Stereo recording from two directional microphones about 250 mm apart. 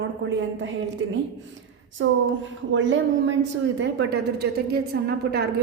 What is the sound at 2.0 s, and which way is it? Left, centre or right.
A woman's voice, right.